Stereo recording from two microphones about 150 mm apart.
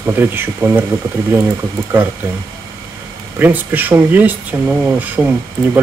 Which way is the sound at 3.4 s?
10° right (ahead or behind).